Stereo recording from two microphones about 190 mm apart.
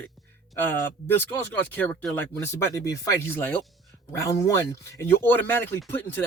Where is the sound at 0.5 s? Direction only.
10° left (ahead or behind).